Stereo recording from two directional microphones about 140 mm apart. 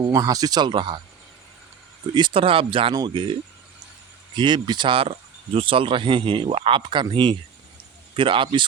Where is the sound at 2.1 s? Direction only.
35° right (ahead or behind).